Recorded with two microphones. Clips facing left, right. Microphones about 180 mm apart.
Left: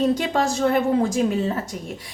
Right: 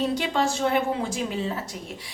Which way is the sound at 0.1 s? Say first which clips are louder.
Left 3 dB; 45° left (ahead or behind).